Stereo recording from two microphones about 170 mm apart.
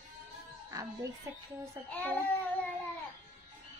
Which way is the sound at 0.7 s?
20° right (ahead or behind).